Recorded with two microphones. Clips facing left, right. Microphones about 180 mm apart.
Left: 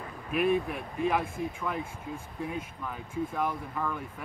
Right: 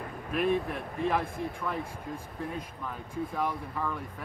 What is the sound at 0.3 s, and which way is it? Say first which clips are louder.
Speech: left 1 dB; 5° left (ahead or behind).